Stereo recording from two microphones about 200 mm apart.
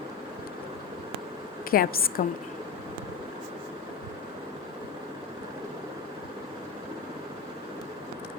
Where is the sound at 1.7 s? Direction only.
45° left (ahead or behind).